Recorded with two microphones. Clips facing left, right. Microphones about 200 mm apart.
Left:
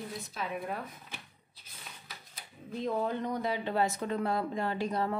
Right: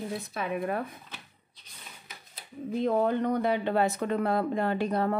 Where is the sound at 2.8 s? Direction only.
60° right (ahead or behind).